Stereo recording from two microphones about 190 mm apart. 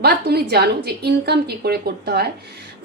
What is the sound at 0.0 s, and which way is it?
A woman's voice, 55° right (ahead or behind).